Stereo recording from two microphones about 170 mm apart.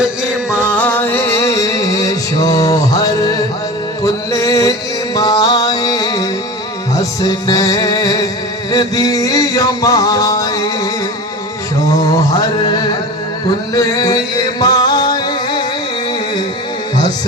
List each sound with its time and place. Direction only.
0.6 s music: 10° left (ahead or behind)
8.7 s a sound: 20° left (ahead or behind)
13.7 s music: 20° left (ahead or behind)